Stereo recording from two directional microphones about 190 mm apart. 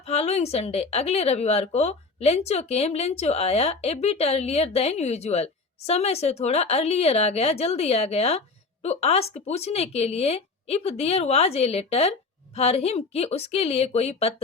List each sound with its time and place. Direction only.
0.0 s a woman's voice: 35° left (ahead or behind)